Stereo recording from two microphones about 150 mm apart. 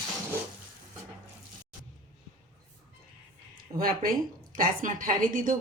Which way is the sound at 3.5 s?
75° right (ahead or behind).